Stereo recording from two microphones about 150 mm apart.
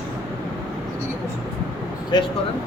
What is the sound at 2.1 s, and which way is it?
Speech, 30° left (ahead or behind).